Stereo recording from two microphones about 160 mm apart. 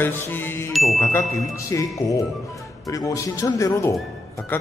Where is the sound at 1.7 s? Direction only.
20° left (ahead or behind).